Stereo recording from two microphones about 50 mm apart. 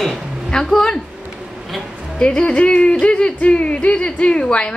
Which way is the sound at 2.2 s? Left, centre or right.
Centre.